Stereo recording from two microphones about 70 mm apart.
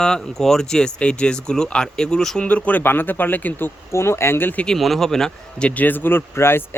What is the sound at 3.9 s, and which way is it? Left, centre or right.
Speech, left.